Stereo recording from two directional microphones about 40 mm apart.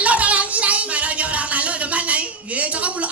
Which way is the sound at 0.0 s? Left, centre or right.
Right.